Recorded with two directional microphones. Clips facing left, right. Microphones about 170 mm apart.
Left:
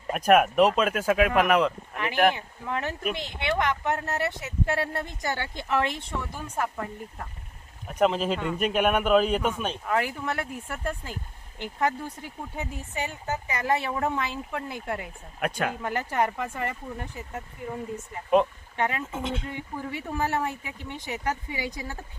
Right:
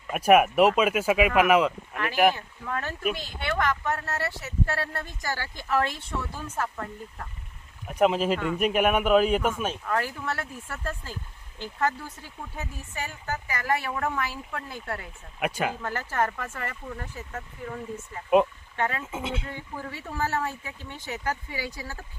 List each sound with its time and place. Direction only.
0.1 s speech: 5° right (ahead or behind)
2.3 s speech: 20° left (ahead or behind)
7.9 s speech: 5° right (ahead or behind)
9.8 s speech: 15° left (ahead or behind)
15.4 s speech: 5° right (ahead or behind)
15.8 s speech: 15° left (ahead or behind)
18.8 s speech: 15° left (ahead or behind)
19.1 s speech: 5° right (ahead or behind)
19.5 s speech: 15° left (ahead or behind)